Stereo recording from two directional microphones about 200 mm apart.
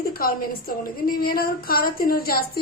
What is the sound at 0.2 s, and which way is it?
A woman's voice, 45° left (ahead or behind).